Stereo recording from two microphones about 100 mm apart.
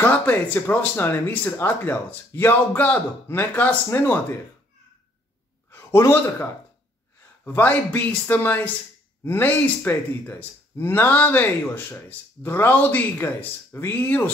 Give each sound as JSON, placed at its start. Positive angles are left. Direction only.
{"t": 0.0, "sound": "speech", "side_deg": 20}
{"t": 5.7, "sound": "a sound", "side_deg": 25}
{"t": 7.4, "sound": "speech", "side_deg": 15}